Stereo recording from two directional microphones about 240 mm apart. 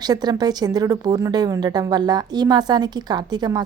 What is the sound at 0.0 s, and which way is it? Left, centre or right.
A woman's voice, centre.